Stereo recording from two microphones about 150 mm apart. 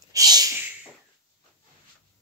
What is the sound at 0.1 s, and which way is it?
Snort, 25° right (ahead or behind).